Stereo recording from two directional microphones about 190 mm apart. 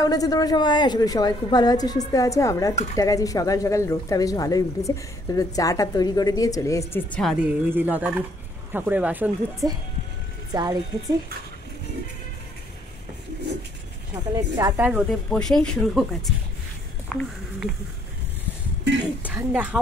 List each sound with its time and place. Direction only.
0.0 s a woman's voice: 20° left (ahead or behind); by 9.7 s 10° right (ahead or behind)
10.5 s speech: 20° right (ahead or behind)
14.1 s speech: 15° right (ahead or behind)
14.9 s speech: centre (ahead or behind)
19.2 s speech: 10° right (ahead or behind)